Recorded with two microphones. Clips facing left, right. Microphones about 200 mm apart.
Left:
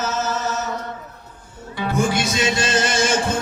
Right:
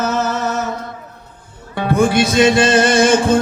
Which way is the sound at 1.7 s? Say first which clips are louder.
Right 7 dB; 60° right (ahead or behind).